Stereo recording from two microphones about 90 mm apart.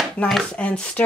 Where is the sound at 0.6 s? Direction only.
10° left (ahead or behind).